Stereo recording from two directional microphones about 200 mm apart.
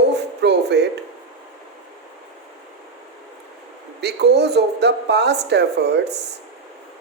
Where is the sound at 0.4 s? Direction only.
60° right (ahead or behind).